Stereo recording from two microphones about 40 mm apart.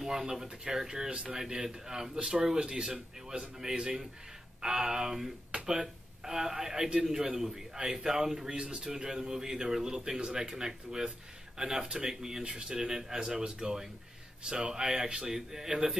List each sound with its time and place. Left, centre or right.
0.0 s speech: centre